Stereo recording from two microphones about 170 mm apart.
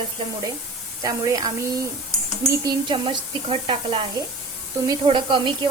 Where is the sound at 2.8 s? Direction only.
30° right (ahead or behind).